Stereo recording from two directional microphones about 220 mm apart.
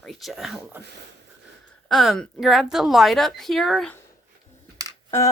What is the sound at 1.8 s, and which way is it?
A woman's voice, centre (ahead or behind).